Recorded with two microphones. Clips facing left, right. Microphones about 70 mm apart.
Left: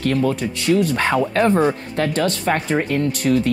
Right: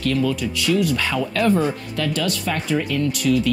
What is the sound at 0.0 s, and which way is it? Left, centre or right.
Speech, left.